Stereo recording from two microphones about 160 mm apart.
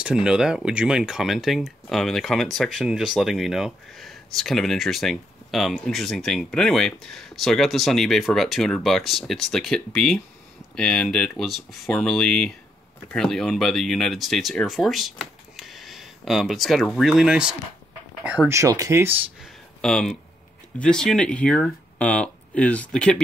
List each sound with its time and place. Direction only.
0.0 s speech: 5° right (ahead or behind)
18.6 s speech: 20° right (ahead or behind)
19.4 s a sound: 5° left (ahead or behind)
20.8 s speech: 5° left (ahead or behind)